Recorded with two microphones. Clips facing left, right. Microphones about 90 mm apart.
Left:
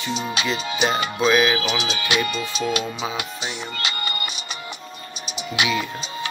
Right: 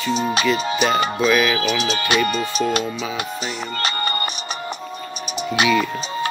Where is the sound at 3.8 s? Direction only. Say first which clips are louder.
Right 7 dB; 40° right (ahead or behind).